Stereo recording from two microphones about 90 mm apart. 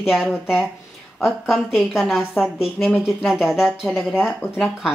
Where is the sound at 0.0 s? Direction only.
5° right (ahead or behind).